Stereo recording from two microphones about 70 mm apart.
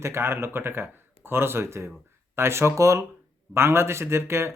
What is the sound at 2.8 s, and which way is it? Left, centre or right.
Speech, right.